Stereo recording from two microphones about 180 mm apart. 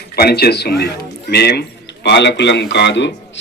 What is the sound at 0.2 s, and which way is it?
A man's voice, 60° left (ahead or behind).